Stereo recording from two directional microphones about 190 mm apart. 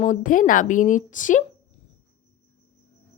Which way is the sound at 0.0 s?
40° left (ahead or behind).